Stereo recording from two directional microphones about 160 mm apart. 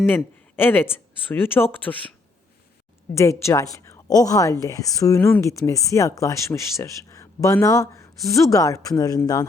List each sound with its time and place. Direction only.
0.5 s speech: 15° left (ahead or behind)
3.2 s speech: 20° left (ahead or behind)